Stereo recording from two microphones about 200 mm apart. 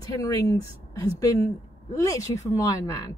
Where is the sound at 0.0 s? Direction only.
20° left (ahead or behind).